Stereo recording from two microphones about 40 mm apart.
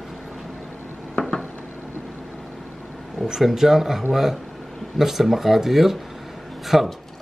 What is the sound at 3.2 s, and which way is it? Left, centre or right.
Speech, centre.